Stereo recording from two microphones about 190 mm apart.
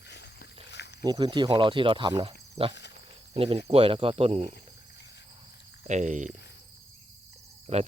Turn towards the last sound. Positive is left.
turn(degrees=-35)  # may be behind; listen again after turning